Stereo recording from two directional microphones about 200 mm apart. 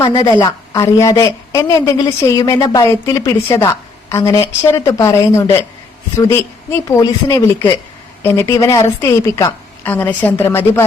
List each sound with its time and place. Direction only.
0.0 s a woman's voice: 25° left (ahead or behind)